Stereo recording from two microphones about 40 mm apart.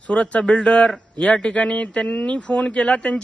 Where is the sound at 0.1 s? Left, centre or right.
Left.